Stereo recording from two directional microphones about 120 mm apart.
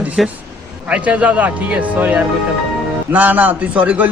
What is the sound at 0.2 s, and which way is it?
Speech, centre (ahead or behind).